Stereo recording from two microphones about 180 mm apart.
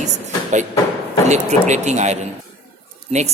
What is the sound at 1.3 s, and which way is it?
Speech, 40° right (ahead or behind).